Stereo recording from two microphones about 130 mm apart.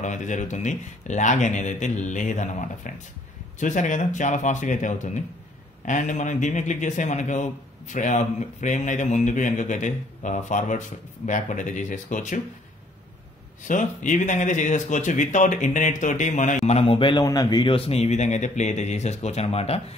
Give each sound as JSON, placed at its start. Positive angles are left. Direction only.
{"t": 0.0, "sound": "a man's voice", "side_deg": 70}
{"t": 13.7, "sound": "a man's voice", "side_deg": 75}
{"t": 16.6, "sound": "a man's voice", "side_deg": 50}